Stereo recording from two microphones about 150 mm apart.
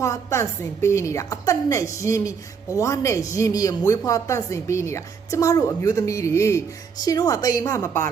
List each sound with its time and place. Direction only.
0.0 s speech: 20° left (ahead or behind)